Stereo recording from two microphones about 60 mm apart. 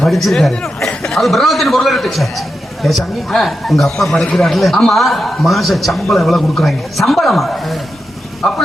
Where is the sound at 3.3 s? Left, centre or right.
Centre.